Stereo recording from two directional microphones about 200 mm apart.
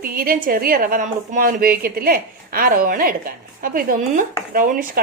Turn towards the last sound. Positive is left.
turn(degrees=-45)  # may be behind; listen again after turning